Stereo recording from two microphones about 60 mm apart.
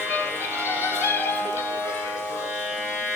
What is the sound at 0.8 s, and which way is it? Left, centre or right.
Music, left.